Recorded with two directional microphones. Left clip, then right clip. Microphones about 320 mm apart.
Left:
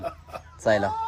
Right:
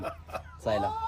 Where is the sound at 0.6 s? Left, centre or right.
Left.